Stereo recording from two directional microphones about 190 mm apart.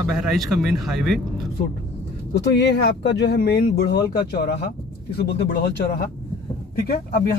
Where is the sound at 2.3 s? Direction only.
65° left (ahead or behind).